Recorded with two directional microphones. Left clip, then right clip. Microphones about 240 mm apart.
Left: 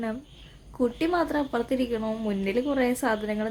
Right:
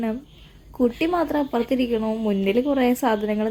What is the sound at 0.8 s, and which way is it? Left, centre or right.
A woman's voice, centre.